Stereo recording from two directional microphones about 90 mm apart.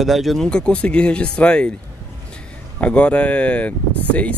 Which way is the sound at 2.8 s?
15° left (ahead or behind).